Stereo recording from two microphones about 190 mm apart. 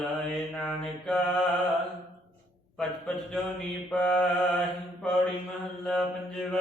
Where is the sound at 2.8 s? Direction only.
5° left (ahead or behind).